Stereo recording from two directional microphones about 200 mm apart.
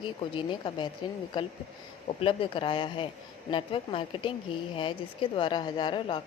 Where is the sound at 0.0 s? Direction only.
25° left (ahead or behind).